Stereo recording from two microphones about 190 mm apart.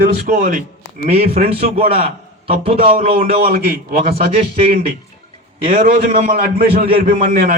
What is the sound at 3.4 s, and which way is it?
Speech, 55° right (ahead or behind).